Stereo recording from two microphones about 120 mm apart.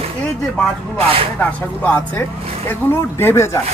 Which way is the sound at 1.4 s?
15° left (ahead or behind).